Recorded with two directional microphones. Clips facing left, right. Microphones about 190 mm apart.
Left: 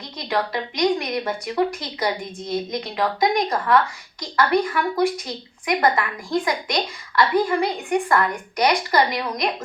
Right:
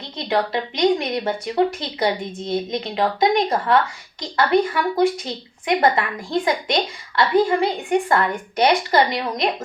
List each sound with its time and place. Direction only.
0.3 s a woman's voice: 25° right (ahead or behind)